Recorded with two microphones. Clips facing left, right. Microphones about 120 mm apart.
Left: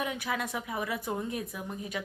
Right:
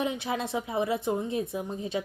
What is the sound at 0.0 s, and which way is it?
A woman's voice, 25° right (ahead or behind).